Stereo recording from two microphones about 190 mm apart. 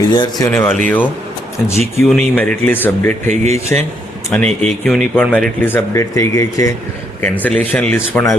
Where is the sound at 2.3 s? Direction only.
10° left (ahead or behind).